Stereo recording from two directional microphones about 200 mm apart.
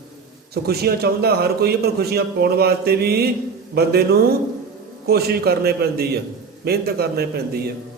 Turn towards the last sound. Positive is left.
turn(degrees=-50)  # may be behind; listen again after turning